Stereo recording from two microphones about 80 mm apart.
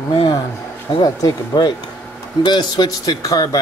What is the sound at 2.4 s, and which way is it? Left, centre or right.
Speech, left.